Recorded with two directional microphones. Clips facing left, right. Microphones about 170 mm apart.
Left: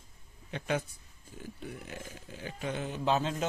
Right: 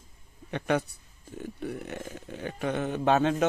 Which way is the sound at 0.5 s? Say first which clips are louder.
Right 6 dB; 65° right (ahead or behind).